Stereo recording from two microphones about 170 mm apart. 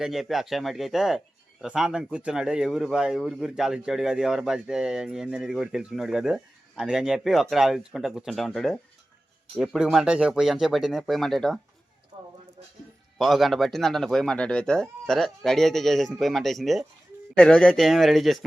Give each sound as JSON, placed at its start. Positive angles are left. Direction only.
{"t": 0.0, "sound": "speech", "side_deg": 0}
{"t": 12.1, "sound": "a sound", "side_deg": -30}
{"t": 13.1, "sound": "speech", "side_deg": 0}